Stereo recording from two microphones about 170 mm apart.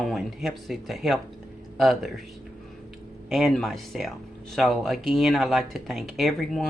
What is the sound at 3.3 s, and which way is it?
Speech, centre (ahead or behind).